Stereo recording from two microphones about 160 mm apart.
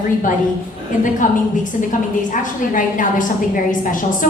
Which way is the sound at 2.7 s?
55° left (ahead or behind).